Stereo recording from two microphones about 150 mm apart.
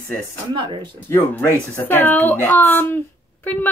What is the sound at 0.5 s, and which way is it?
Speech, 30° right (ahead or behind).